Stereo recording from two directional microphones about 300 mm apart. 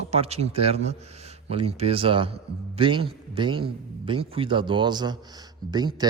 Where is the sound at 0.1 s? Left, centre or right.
Right.